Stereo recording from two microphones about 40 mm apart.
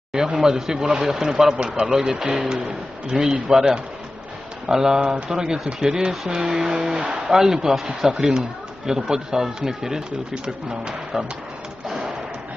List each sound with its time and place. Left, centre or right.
0.4 s speech: centre
2.0 s speech: centre
3.2 s speech: right
3.4 s speech: centre
5.0 s speech: right
7.2 s speech: centre